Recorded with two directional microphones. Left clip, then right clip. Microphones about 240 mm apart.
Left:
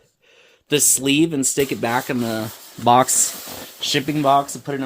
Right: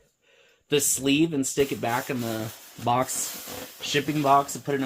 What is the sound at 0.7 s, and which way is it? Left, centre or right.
Speech, left.